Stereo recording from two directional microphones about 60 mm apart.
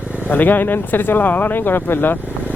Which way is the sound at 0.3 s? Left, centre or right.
Left.